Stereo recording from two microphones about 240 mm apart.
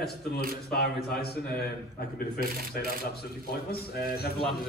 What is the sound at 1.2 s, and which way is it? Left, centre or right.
A man's voice, left.